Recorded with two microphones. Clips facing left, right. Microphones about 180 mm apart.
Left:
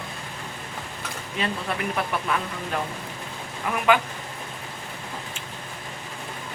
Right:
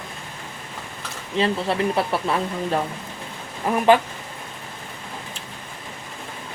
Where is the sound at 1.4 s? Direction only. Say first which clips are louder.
Right 7 dB; 30° right (ahead or behind).